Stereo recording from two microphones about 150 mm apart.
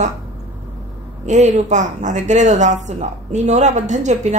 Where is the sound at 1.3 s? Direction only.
50° right (ahead or behind).